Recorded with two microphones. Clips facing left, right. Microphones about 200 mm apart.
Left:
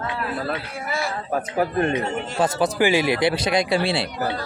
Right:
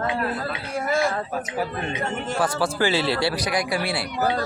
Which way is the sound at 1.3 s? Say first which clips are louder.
Left 5 dB; 55° left (ahead or behind).